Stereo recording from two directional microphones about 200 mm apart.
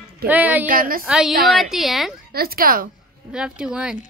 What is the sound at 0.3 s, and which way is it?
Speech, 10° right (ahead or behind).